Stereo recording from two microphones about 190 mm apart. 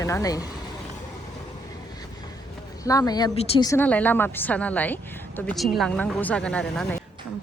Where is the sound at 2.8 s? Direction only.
20° left (ahead or behind).